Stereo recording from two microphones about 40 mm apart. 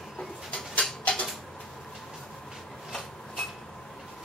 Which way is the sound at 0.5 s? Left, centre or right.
Left.